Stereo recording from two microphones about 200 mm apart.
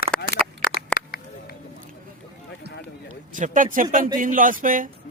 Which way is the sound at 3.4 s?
40° right (ahead or behind).